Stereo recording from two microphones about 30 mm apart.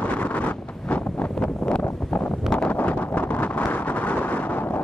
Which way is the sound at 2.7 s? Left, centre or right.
Left.